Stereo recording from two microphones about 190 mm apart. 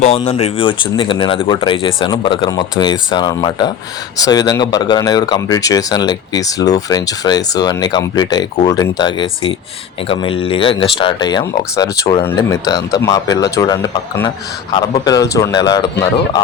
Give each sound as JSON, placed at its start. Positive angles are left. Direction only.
{"t": 0.0, "sound": "speech", "side_deg": 35}